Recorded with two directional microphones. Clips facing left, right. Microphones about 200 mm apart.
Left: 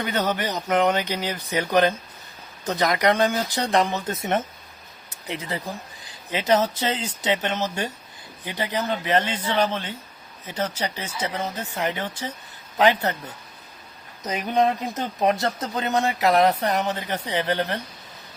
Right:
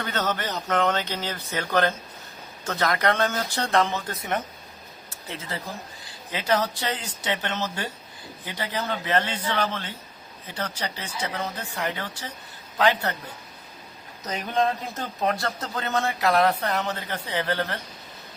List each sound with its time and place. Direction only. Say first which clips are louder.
0.0 s speech: left 3 dB; 15° left (ahead or behind)
14.3 s speech: left 3 dB; 20° left (ahead or behind)